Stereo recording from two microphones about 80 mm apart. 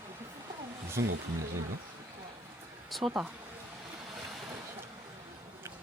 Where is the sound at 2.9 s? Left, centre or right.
Centre.